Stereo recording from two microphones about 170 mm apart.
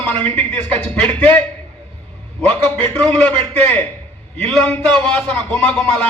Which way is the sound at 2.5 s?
10° left (ahead or behind).